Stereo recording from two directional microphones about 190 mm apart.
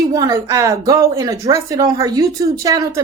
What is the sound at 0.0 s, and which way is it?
A woman's voice, 20° right (ahead or behind).